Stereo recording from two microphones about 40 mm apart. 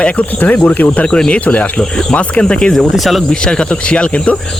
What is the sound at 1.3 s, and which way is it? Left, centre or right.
Speech, left.